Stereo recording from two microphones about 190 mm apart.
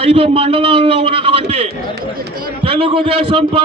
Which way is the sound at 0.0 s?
30° right (ahead or behind).